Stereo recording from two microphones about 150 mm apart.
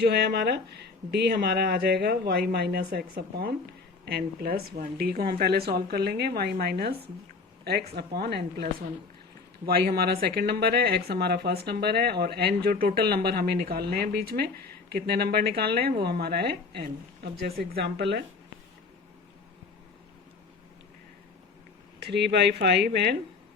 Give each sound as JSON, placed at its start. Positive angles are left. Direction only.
{"t": 0.0, "sound": "speech", "side_deg": -90}
{"t": 5.3, "sound": "speech", "side_deg": -90}
{"t": 22.0, "sound": "speech", "side_deg": -90}